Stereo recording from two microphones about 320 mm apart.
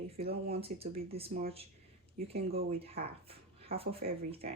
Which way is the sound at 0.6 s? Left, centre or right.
Centre.